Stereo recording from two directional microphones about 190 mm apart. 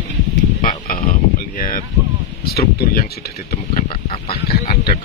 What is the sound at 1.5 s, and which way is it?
Speech, 45° left (ahead or behind).